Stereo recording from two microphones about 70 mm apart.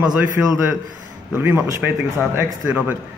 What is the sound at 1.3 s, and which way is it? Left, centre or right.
A man's voice, right.